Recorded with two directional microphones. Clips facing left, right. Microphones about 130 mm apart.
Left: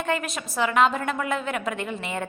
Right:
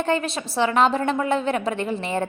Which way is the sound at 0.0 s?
30° right (ahead or behind).